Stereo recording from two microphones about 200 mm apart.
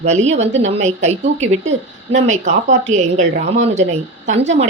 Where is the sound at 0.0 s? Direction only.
35° right (ahead or behind).